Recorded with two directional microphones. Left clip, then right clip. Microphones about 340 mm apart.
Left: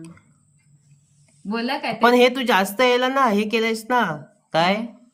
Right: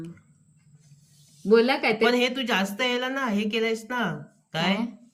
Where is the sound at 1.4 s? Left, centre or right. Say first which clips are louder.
Right 6 dB; centre.